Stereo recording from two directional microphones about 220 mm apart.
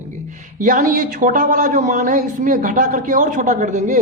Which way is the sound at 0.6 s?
35° right (ahead or behind).